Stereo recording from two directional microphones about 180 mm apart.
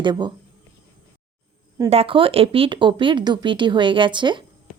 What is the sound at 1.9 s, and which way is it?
Speech, 30° right (ahead or behind).